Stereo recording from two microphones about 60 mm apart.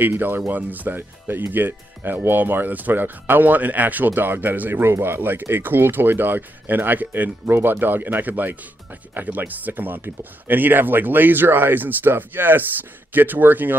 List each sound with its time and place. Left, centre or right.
0.0 s speech: right